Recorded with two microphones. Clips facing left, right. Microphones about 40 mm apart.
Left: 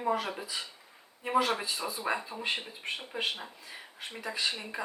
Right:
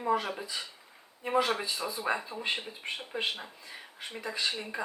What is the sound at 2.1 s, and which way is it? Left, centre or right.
Speech, centre.